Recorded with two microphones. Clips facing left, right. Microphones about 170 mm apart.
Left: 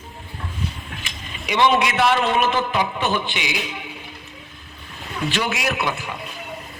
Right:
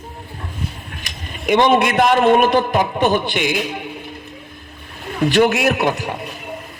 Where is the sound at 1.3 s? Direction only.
50° right (ahead or behind).